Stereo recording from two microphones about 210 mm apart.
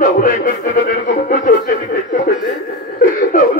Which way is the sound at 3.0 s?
40° left (ahead or behind).